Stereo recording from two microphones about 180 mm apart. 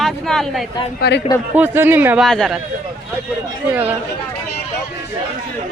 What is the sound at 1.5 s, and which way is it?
Speech, 10° right (ahead or behind).